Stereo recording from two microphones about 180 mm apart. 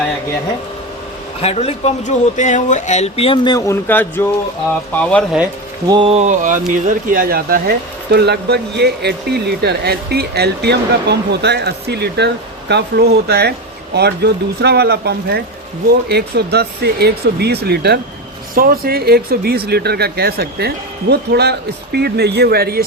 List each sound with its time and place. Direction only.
1.4 s speech: 35° left (ahead or behind)
3.8 s speech: 10° left (ahead or behind)
5.9 s speech: 30° right (ahead or behind); by 22.8 s 60° right (ahead or behind)